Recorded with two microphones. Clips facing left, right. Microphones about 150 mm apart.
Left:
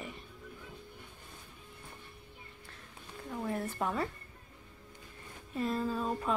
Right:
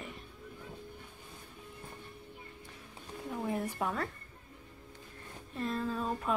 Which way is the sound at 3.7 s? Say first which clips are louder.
Left 1 dB; centre (ahead or behind).